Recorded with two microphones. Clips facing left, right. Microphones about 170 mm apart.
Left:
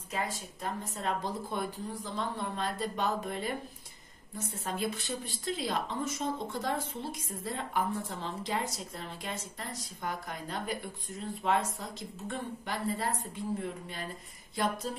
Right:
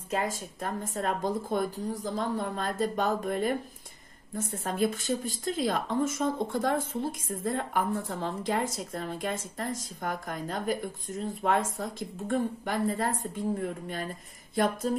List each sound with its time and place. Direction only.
0.1 s a woman's voice: 50° right (ahead or behind)